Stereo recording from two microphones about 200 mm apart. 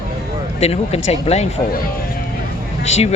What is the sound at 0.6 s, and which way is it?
Speech, 30° left (ahead or behind).